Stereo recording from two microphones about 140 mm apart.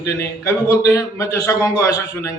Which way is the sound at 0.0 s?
20° left (ahead or behind).